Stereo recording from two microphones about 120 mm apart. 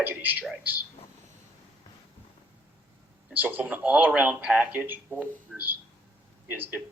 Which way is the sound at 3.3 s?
15° right (ahead or behind).